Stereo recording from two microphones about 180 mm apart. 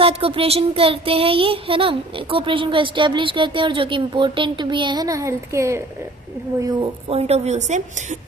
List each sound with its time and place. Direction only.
0.0 s child singing: 30° right (ahead or behind)
7.1 s a woman's voice: 35° right (ahead or behind)